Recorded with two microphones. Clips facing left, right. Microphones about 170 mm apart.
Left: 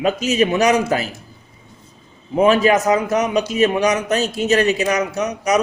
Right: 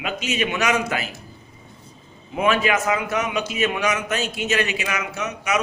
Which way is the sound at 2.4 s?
35° left (ahead or behind).